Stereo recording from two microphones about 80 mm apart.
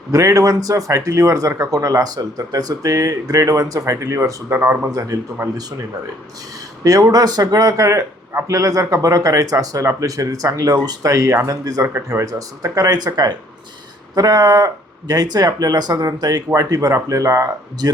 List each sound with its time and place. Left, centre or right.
0.1 s speech: right
4.9 s speech: right
6.8 s speech: right